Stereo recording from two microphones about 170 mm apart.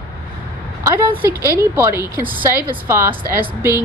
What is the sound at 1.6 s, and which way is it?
A woman's voice, 15° right (ahead or behind).